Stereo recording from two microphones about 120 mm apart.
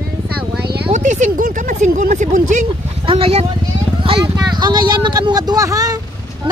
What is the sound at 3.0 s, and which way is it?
Speech, 50° right (ahead or behind).